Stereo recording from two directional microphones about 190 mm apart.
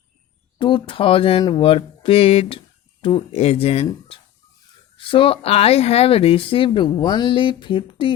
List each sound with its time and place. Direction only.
0.6 s speech: 25° left (ahead or behind)
4.9 s speech: 25° left (ahead or behind)